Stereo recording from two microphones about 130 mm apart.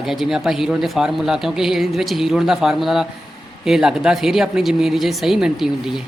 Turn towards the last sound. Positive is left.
turn(degrees=-5)  # may be behind; listen again after turning